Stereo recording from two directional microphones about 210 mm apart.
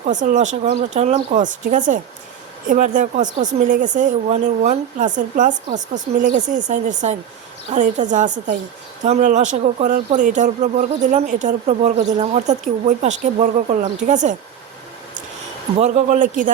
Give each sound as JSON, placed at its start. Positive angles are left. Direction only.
{"t": 0.0, "sound": "speech", "side_deg": -35}
{"t": 15.8, "sound": "speech", "side_deg": -35}